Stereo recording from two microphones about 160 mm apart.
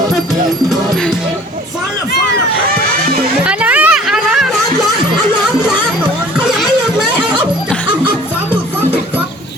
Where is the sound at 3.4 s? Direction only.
10° right (ahead or behind).